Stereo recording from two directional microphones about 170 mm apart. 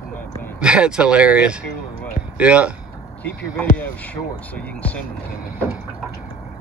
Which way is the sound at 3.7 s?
10° left (ahead or behind).